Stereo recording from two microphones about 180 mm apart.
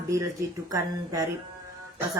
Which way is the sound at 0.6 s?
20° right (ahead or behind).